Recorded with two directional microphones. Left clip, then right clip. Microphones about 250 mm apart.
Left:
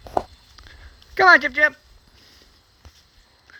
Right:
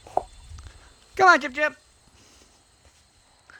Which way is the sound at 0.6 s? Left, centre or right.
Centre.